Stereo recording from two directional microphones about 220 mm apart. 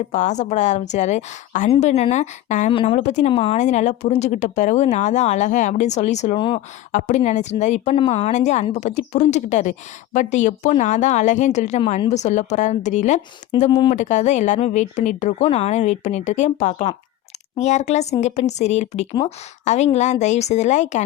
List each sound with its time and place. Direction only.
0.1 s a woman's voice: 35° left (ahead or behind)
13.7 s speech: 20° left (ahead or behind)
13.9 s a woman's voice: 35° left (ahead or behind)